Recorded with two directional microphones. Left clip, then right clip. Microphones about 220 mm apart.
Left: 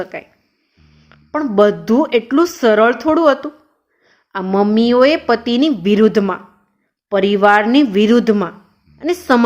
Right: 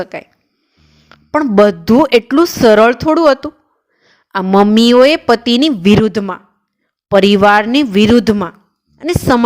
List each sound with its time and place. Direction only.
0.0 s a woman's voice: 45° right (ahead or behind)